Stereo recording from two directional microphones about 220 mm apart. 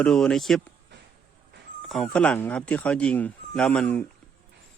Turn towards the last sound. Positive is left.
turn(degrees=5)  # may be behind; listen again after turning